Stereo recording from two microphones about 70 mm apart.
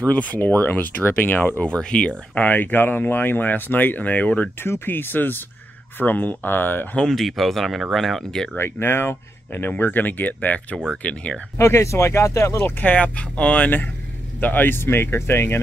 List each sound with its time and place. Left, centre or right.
0.0 s speech: centre
1.6 s speech: centre
4.6 s speech: left
7.0 s speech: centre
8.5 s speech: left; by 11.3 s centre
11.5 s speech: left
12.6 s speech: left